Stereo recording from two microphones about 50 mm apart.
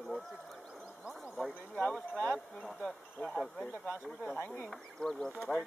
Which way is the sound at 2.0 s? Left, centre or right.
Left.